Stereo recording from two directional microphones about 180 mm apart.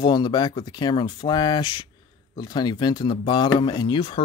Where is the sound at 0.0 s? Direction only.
25° left (ahead or behind).